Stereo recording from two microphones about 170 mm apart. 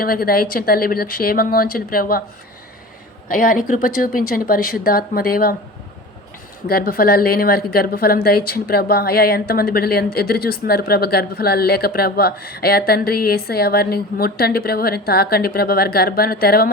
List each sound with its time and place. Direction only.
0.0 s a woman's voice: 60° left (ahead or behind)
3.3 s a woman's voice: 55° left (ahead or behind)
6.7 s a woman's voice: 60° left (ahead or behind)